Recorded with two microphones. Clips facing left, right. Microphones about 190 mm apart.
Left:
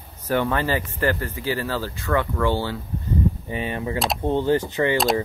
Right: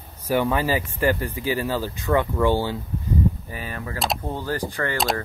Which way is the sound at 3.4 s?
25° left (ahead or behind).